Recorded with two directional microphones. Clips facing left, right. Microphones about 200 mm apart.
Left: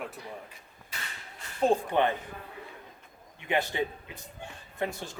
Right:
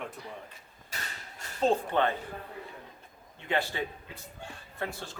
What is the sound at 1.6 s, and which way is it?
Speech, 15° left (ahead or behind).